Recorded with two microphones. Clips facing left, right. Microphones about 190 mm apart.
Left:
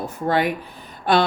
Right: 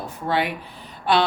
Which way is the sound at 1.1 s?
45° left (ahead or behind).